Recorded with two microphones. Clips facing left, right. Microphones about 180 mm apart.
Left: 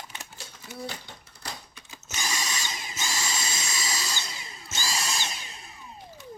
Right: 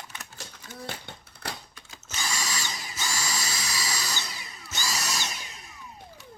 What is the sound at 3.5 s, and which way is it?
Vacuum cleaner, 25° left (ahead or behind).